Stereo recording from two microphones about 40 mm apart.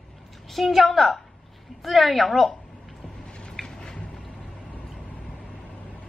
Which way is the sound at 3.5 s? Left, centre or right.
Centre.